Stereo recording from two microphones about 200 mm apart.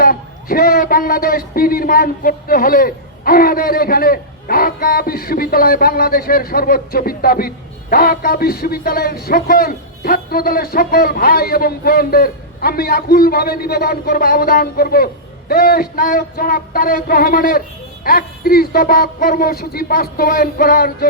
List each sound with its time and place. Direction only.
0.0 s a man's voice: 45° left (ahead or behind)